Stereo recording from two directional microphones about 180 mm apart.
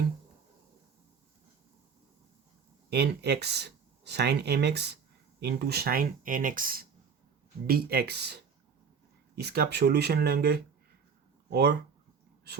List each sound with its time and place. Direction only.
2.9 s speech: 65° right (ahead or behind)
9.4 s speech: 65° right (ahead or behind)